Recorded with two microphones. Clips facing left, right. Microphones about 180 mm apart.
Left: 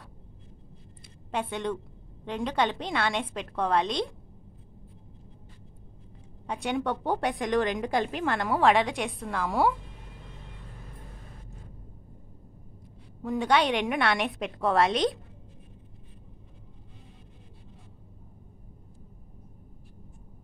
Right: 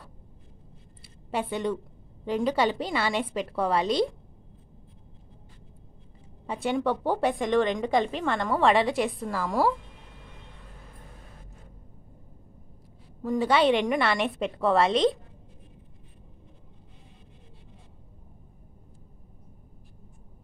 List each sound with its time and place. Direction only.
1.0 s a sound: 5° right (ahead or behind)
2.2 s a woman's voice: 5° right (ahead or behind)
6.4 s a woman's voice: centre (ahead or behind)
13.2 s a woman's voice: centre (ahead or behind)